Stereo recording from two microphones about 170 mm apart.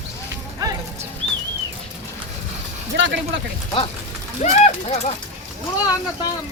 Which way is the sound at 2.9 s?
90° right.